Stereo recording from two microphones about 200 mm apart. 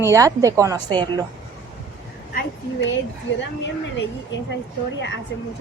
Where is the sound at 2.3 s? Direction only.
60° left (ahead or behind).